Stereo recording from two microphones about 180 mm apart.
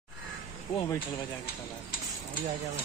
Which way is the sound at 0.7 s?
25° left (ahead or behind).